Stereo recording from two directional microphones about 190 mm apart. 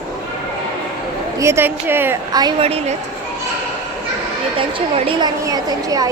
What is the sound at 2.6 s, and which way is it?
Speech, 30° right (ahead or behind).